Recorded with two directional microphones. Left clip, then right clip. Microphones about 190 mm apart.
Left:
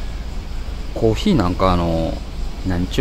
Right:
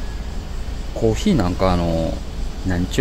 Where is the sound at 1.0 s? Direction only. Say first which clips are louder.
Left 2 dB; 15° left (ahead or behind).